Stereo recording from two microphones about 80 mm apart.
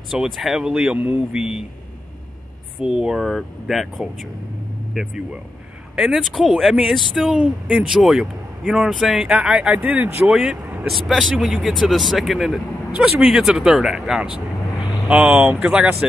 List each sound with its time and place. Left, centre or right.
0.1 s speech: centre
0.9 s a man's voice: right
1.3 s speech: centre
2.8 s speech: centre
3.2 s speech: centre
7.3 s a man's voice: centre
10.3 s speech: centre